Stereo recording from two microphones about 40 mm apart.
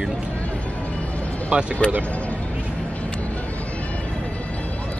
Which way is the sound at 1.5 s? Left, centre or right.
Right.